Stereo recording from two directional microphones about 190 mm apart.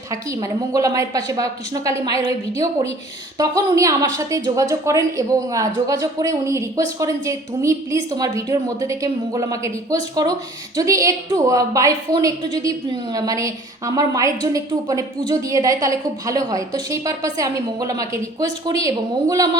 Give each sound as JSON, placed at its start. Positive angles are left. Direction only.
{"t": 0.1, "sound": "a woman's voice", "side_deg": -15}
{"t": 3.3, "sound": "a woman's voice", "side_deg": -20}